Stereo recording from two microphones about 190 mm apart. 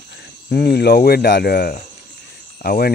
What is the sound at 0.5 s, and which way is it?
Speech, 60° left (ahead or behind).